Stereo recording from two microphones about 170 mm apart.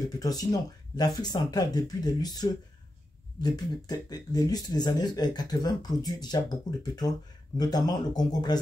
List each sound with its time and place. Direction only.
0.2 s speech: 20° left (ahead or behind)